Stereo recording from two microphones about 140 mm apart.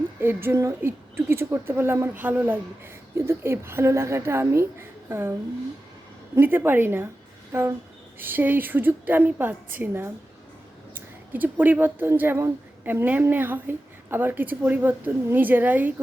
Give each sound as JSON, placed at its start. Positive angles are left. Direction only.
{"t": 0.2, "sound": "speech", "side_deg": -15}
{"t": 6.3, "sound": "speech", "side_deg": -15}